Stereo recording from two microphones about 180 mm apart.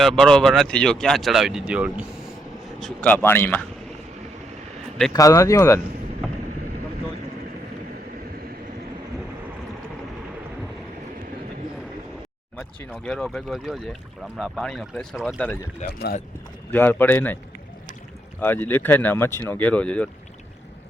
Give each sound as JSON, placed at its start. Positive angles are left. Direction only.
{"t": 0.0, "sound": "speech", "side_deg": 0}
{"t": 2.8, "sound": "speech", "side_deg": 10}
{"t": 5.1, "sound": "speech", "side_deg": 20}
{"t": 12.9, "sound": "speech", "side_deg": 0}
{"t": 15.8, "sound": "speech", "side_deg": 40}
{"t": 16.7, "sound": "speech", "side_deg": 10}
{"t": 18.3, "sound": "speech", "side_deg": 10}